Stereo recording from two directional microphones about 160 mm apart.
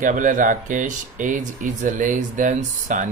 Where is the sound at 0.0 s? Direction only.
55° right (ahead or behind).